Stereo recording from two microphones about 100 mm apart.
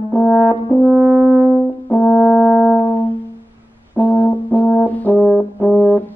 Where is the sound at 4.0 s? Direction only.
20° left (ahead or behind).